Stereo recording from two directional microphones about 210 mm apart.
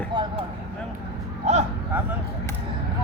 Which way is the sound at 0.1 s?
20° right (ahead or behind).